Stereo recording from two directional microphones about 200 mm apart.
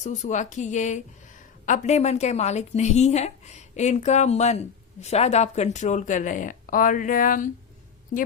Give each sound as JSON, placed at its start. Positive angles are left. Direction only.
{"t": 0.0, "sound": "a woman's voice", "side_deg": 35}